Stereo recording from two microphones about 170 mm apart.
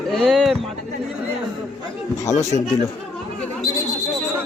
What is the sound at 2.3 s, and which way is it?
Speech, 45° left (ahead or behind).